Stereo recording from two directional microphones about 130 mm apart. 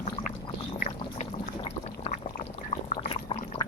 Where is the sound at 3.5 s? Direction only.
45° left (ahead or behind).